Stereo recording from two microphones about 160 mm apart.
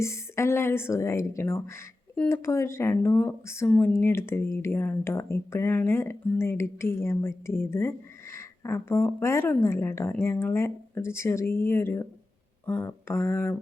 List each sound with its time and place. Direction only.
0.0 s speech: 15° left (ahead or behind)